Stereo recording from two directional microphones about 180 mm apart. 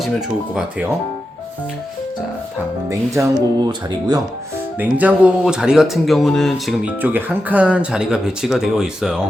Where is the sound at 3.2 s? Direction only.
15° right (ahead or behind).